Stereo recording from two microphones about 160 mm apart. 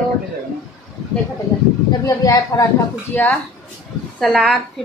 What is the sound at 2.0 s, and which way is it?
Speech, 20° left (ahead or behind).